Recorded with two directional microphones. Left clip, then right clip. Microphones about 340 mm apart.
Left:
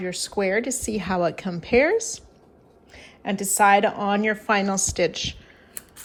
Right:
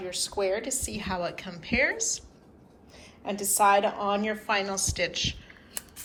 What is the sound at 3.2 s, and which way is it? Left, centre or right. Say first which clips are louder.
A woman's voice: left 4 dB; left.